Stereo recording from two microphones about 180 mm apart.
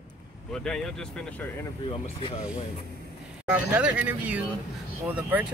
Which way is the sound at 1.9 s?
30° left (ahead or behind).